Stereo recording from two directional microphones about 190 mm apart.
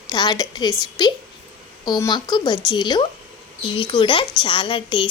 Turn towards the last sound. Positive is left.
turn(degrees=25)  # may be behind; listen again after turning